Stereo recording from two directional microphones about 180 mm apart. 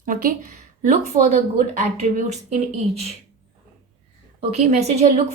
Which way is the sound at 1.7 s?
40° right (ahead or behind).